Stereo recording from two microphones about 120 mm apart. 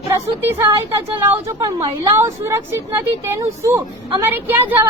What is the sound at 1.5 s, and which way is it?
Speech, 25° right (ahead or behind).